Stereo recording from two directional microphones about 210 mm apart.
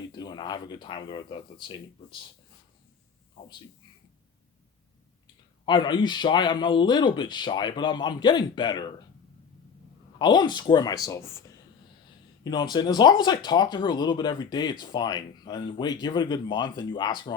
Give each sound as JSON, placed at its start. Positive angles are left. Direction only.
{"t": 0.2, "sound": "speech", "side_deg": 20}
{"t": 5.6, "sound": "speech", "side_deg": 20}
{"t": 10.2, "sound": "speech", "side_deg": 20}